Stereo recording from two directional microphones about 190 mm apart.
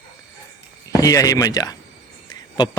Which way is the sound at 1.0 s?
20° left (ahead or behind).